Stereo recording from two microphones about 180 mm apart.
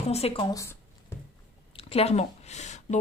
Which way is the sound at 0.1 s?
35° left (ahead or behind).